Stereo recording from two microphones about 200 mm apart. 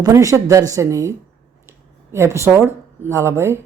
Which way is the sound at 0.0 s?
15° right (ahead or behind).